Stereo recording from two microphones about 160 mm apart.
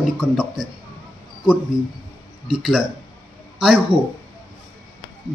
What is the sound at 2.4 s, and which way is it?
A man's voice, 5° right (ahead or behind).